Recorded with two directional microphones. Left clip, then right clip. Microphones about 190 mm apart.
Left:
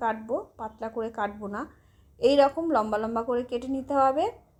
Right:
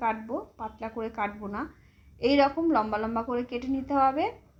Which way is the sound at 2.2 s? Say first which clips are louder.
Left 2 dB; 50° left (ahead or behind).